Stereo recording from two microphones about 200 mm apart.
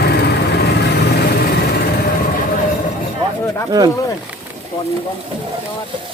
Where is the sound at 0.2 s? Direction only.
55° left (ahead or behind).